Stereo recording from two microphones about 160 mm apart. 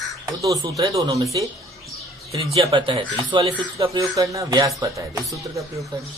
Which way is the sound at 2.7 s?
30° right (ahead or behind).